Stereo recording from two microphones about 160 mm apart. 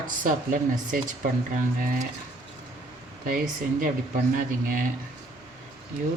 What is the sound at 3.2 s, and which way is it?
Speech, 60° right (ahead or behind).